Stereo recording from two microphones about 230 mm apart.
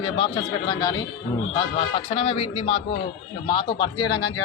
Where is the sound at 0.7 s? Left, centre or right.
Centre.